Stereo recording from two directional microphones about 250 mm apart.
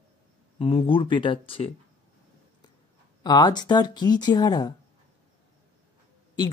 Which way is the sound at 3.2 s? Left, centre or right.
Centre.